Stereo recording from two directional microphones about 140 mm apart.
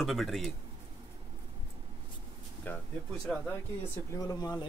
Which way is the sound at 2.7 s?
15° left (ahead or behind).